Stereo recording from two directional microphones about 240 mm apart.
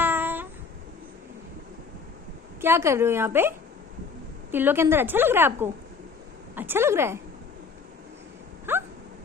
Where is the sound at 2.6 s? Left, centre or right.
Centre.